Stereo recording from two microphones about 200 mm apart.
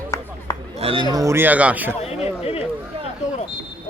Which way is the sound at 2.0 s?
30° left (ahead or behind).